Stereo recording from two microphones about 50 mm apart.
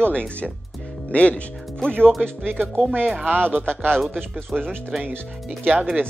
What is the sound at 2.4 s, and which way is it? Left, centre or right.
Speech, right.